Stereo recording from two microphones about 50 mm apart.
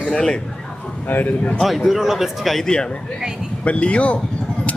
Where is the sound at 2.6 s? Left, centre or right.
Centre.